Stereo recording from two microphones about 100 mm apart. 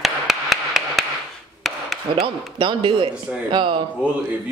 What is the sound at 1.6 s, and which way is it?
Chop, centre (ahead or behind).